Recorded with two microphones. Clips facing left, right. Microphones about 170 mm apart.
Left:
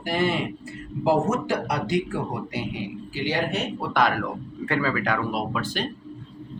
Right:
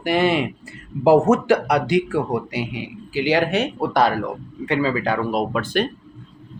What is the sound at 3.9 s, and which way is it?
A man's voice, 30° right (ahead or behind).